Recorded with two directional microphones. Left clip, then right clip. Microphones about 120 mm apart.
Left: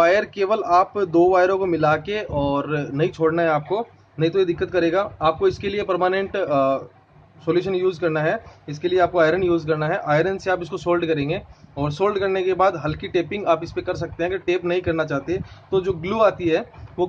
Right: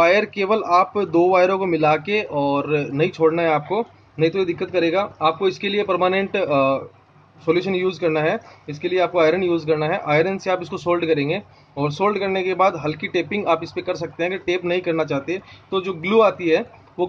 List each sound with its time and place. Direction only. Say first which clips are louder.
0.0 s speech: right 1 dB; 30° right (ahead or behind)